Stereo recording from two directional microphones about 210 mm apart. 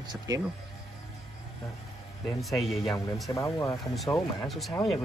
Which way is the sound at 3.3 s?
15° left (ahead or behind).